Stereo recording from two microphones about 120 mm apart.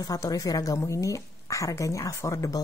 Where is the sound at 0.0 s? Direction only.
30° left (ahead or behind).